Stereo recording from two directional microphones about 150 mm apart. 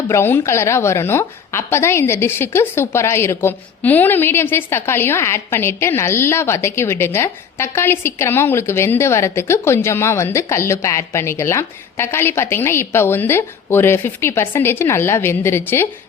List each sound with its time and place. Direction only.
0.1 s a woman's voice: 15° left (ahead or behind)